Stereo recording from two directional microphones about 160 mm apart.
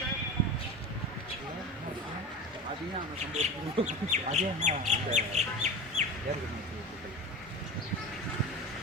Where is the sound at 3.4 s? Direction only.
45° right (ahead or behind).